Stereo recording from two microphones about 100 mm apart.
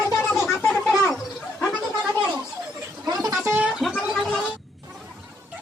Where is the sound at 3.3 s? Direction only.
30° right (ahead or behind).